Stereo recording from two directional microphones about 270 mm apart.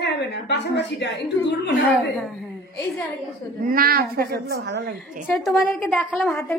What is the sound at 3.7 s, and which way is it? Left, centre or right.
A woman's voice, right.